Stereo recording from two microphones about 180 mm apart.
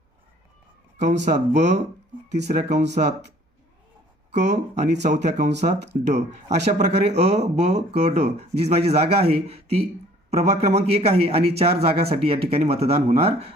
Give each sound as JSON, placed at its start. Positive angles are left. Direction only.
{"t": 0.9, "sound": "a man's voice", "side_deg": -40}
{"t": 4.3, "sound": "a man's voice", "side_deg": -40}